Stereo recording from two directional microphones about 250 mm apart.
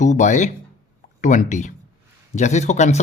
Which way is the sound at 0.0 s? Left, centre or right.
Left.